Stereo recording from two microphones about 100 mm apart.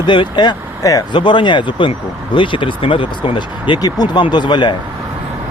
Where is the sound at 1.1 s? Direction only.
55° left (ahead or behind).